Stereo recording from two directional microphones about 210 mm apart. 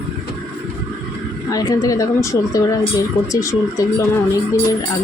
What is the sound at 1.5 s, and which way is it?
Speech, 15° left (ahead or behind).